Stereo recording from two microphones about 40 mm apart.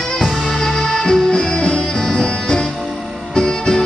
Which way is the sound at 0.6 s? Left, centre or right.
Centre.